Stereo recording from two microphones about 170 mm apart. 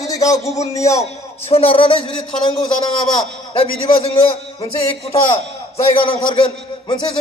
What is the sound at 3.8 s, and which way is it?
A man's voice, 35° left (ahead or behind).